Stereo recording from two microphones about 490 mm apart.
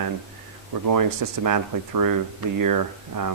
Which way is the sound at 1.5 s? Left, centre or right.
Right.